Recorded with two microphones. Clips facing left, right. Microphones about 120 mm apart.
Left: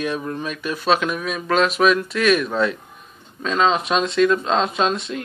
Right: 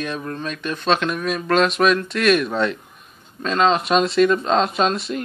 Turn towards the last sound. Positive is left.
turn(degrees=0)  # may be behind; listen again after turning